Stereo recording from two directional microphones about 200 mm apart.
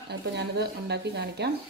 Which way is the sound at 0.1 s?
55° right (ahead or behind).